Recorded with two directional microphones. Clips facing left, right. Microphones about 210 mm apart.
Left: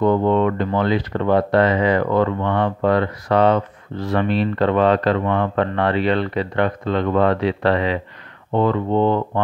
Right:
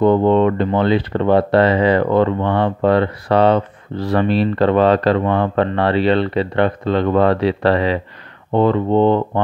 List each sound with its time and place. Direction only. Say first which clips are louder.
0.0 s speech: right 4 dB; 25° right (ahead or behind)